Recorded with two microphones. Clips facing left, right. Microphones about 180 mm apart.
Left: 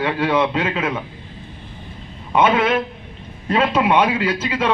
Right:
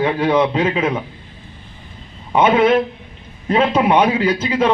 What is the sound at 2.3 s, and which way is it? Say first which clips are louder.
Speech: right 3 dB; 25° right (ahead or behind).